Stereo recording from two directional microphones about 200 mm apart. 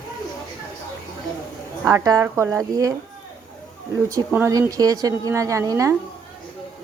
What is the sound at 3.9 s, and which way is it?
A woman's voice, 15° right (ahead or behind).